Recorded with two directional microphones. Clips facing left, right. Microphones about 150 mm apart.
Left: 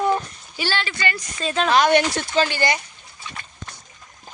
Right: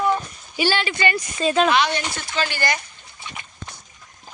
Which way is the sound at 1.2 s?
5° right (ahead or behind).